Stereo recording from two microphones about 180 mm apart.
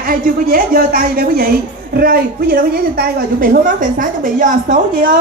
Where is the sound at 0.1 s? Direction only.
50° right (ahead or behind).